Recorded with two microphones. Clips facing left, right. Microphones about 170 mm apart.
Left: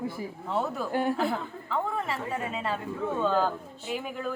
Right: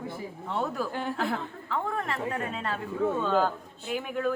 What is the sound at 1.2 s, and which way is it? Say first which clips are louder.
Speech: left 1 dB; centre (ahead or behind).